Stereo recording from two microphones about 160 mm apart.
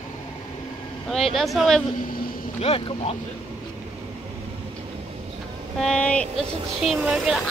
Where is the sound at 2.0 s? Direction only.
65° left (ahead or behind).